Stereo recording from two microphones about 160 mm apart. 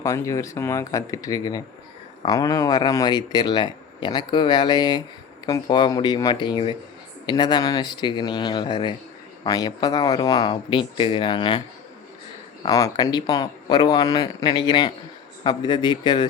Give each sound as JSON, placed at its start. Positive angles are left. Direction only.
{"t": 0.0, "sound": "speech", "side_deg": 20}
{"t": 12.6, "sound": "speech", "side_deg": 20}